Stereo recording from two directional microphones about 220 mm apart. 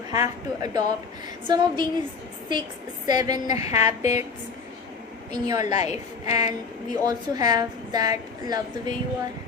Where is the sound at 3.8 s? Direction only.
30° left (ahead or behind).